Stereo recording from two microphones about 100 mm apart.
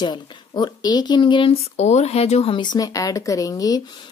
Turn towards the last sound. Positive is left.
turn(degrees=35)  # may be behind; listen again after turning